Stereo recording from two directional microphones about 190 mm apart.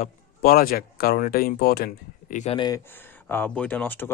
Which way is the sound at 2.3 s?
35° left (ahead or behind).